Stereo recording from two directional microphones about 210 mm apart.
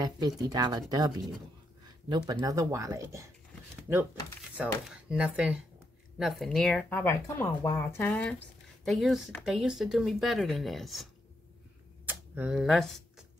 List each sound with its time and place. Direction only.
0.0 s speech: 20° right (ahead or behind); by 11.1 s centre (ahead or behind)
12.1 s speech: 5° right (ahead or behind)